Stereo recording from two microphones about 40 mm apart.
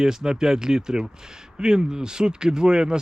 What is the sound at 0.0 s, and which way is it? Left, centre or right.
A man's voice, centre.